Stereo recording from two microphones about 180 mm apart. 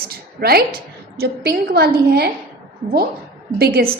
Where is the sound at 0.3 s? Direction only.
60° right (ahead or behind).